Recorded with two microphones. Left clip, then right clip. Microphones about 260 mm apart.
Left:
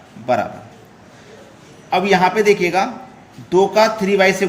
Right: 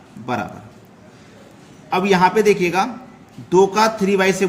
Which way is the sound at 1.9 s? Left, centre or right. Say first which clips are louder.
Left 1 dB; right.